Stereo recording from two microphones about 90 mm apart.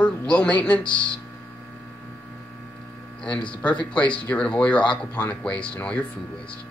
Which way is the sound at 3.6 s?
15° left (ahead or behind).